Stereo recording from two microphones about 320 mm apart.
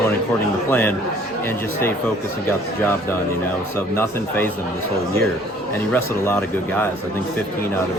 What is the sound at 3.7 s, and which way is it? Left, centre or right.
Speech, centre.